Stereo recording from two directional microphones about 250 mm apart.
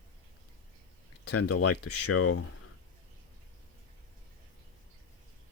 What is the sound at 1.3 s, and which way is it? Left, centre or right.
Speech, left.